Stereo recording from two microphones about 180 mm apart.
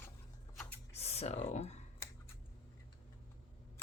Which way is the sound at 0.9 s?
35° left (ahead or behind).